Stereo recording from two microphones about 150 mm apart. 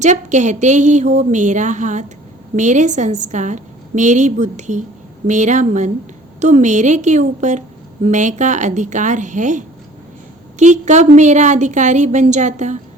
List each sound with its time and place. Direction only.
0.0 s a woman's voice: 50° right (ahead or behind)